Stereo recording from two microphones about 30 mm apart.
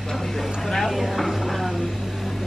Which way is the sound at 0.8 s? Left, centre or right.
Centre.